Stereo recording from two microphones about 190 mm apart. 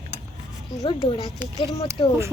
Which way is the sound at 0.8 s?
25° left (ahead or behind).